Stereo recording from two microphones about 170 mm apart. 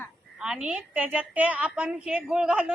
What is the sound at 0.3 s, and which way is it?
A woman's voice, 5° right (ahead or behind).